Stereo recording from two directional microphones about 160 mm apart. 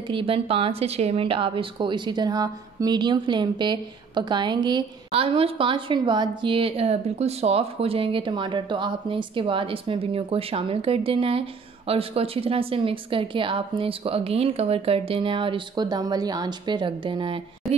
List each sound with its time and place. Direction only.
0.1 s a woman's voice: 35° right (ahead or behind)